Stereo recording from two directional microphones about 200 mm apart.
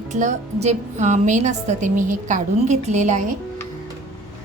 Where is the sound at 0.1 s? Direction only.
35° right (ahead or behind).